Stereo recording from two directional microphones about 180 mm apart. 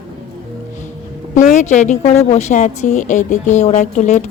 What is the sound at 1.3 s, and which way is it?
A woman's voice, 40° left (ahead or behind).